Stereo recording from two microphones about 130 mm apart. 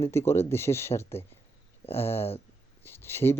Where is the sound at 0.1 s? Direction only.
20° left (ahead or behind).